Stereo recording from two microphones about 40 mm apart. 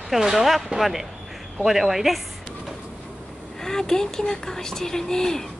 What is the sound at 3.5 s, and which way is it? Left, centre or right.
Speech, centre.